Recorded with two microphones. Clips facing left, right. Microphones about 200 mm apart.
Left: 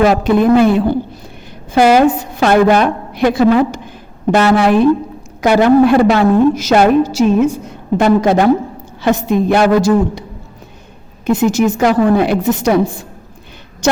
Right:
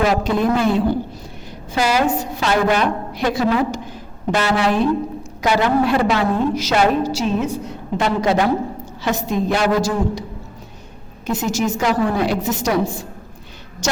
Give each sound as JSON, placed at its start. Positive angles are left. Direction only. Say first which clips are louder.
{"t": 0.0, "sound": "a woman's voice", "louder": "left 7 dB", "side_deg": 60}
{"t": 11.3, "sound": "a woman's voice", "louder": "left 8 dB", "side_deg": 55}